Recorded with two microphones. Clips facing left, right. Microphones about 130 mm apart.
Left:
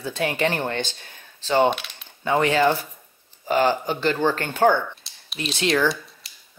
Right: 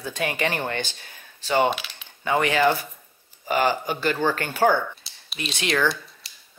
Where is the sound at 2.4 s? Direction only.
20° left (ahead or behind).